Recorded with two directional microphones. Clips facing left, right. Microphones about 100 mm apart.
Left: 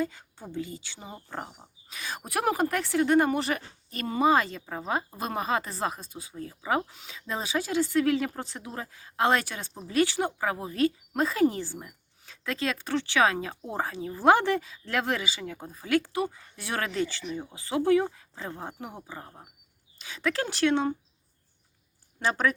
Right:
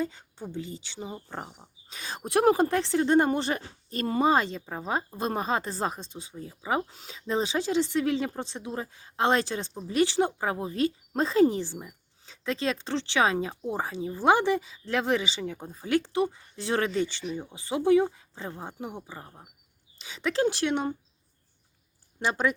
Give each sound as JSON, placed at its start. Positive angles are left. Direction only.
{"t": 0.0, "sound": "speech", "side_deg": -25}
{"t": 1.9, "sound": "speech", "side_deg": -30}
{"t": 4.2, "sound": "speech", "side_deg": -30}
{"t": 6.9, "sound": "a woman's voice", "side_deg": -35}
{"t": 19.0, "sound": "speech", "side_deg": -10}
{"t": 22.2, "sound": "speech", "side_deg": -20}